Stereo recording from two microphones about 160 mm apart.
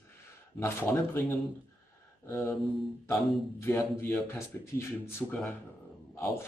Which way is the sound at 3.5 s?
15° left (ahead or behind).